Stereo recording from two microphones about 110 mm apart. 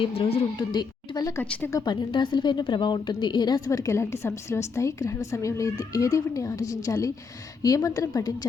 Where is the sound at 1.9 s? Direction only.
45° left (ahead or behind).